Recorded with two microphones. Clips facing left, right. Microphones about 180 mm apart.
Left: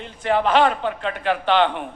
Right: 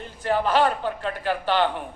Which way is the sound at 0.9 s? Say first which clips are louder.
Left 3 dB; 70° left (ahead or behind).